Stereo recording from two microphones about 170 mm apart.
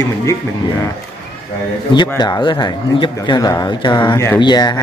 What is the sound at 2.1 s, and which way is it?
Speech, 25° left (ahead or behind).